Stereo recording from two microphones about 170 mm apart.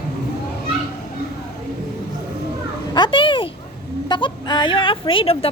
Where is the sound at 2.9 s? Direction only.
30° left (ahead or behind).